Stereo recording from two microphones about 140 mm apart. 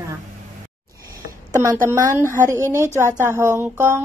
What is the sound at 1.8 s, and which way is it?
Speech, 20° right (ahead or behind).